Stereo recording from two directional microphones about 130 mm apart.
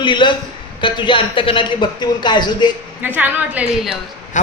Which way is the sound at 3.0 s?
15° right (ahead or behind).